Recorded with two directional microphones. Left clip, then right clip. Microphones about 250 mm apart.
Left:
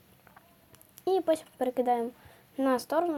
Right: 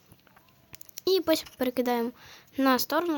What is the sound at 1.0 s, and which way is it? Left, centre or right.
Speech, right.